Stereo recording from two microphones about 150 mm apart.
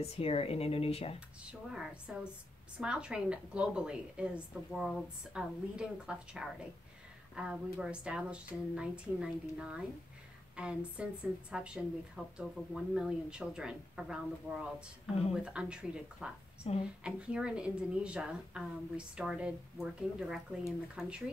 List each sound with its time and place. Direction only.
0.0 s speech: 40° left (ahead or behind)
1.4 s a woman's voice: 5° right (ahead or behind)
16.6 s speech: 40° left (ahead or behind)
17.0 s a woman's voice: 5° right (ahead or behind)